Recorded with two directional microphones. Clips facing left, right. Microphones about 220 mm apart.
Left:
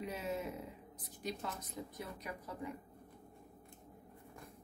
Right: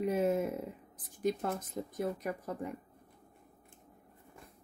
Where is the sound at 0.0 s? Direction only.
50° right (ahead or behind).